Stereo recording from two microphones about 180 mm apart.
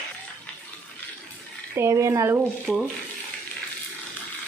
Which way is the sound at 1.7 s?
15° right (ahead or behind).